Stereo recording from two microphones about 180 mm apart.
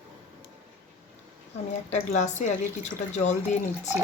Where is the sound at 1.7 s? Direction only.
40° left (ahead or behind).